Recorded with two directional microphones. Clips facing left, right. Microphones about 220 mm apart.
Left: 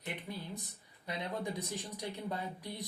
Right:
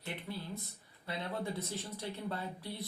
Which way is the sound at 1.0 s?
15° left (ahead or behind).